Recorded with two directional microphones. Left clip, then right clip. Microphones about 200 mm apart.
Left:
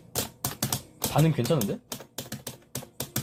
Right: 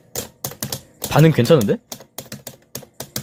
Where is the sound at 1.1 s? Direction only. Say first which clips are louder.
Right 12 dB; 55° right (ahead or behind).